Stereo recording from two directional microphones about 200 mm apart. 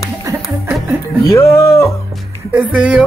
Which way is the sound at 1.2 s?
15° left (ahead or behind).